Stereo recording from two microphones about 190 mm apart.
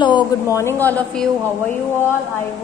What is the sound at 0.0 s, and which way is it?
A woman's voice, 20° left (ahead or behind).